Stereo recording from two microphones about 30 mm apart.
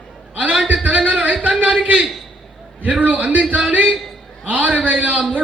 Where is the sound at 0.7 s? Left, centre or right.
Right.